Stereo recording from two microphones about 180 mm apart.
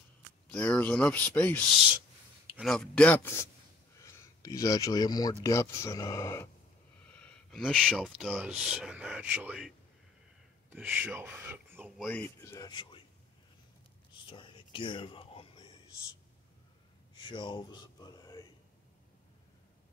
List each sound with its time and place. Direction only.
0.5 s speech: 10° left (ahead or behind)
2.6 s speech: 5° left (ahead or behind)
4.0 s speech: 20° left (ahead or behind)
7.1 s a sound: 5° left (ahead or behind)
8.2 s speech: 5° right (ahead or behind)
12.1 s speech: 10° left (ahead or behind)
14.2 s whispering: 30° left (ahead or behind)
17.2 s a sound: 25° left (ahead or behind)